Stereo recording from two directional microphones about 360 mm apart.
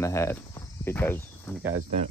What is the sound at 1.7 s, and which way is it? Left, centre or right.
Speech, centre.